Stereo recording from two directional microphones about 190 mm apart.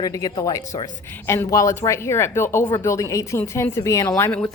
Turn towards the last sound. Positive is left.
turn(degrees=10)  # may be behind; listen again after turning